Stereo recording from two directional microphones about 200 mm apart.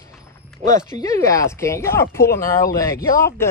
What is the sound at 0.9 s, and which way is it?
Speech, 15° left (ahead or behind).